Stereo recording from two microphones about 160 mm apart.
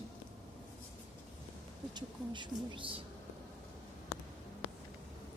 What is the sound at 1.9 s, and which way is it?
Speech, 30° right (ahead or behind).